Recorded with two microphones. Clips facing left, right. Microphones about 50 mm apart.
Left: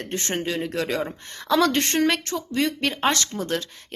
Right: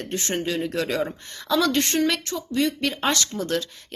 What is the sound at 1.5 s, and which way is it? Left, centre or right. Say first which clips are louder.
Speech: left 1 dB; left.